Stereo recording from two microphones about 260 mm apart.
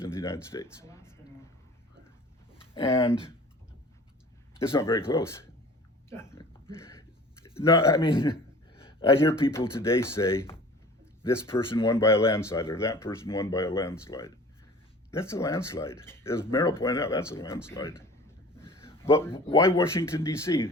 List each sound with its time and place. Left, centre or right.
0.0 s a sound: centre
0.5 s speech: centre
2.7 s speech: left
4.7 s speech: centre
6.1 s a sound: centre
7.5 s speech: centre